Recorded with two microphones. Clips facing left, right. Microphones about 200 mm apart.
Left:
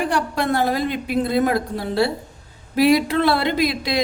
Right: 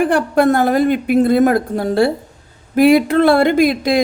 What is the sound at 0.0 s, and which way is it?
Speech, 55° right (ahead or behind).